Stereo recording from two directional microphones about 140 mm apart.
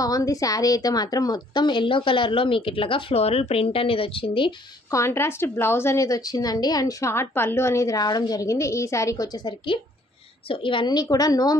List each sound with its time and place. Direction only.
0.0 s a woman's voice: 25° left (ahead or behind)
4.9 s a woman's voice: 20° left (ahead or behind)